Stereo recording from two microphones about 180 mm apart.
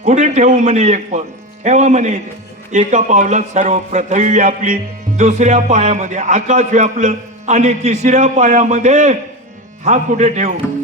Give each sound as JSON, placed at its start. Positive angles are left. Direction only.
{"t": 0.0, "sound": "a man's voice", "side_deg": -40}